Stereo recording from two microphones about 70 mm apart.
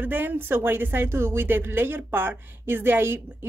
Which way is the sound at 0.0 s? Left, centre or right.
Right.